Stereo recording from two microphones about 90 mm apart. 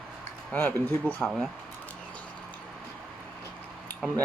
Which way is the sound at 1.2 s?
5° right (ahead or behind).